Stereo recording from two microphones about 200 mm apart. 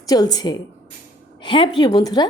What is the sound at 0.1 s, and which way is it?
A woman's voice, 20° left (ahead or behind).